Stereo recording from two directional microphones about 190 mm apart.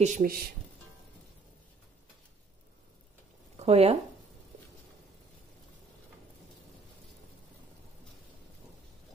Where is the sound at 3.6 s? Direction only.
35° right (ahead or behind).